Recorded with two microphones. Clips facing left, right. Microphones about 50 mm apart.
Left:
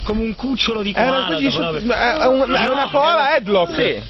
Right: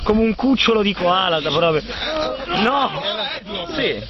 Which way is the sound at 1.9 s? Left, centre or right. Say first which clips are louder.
Left 8 dB; left.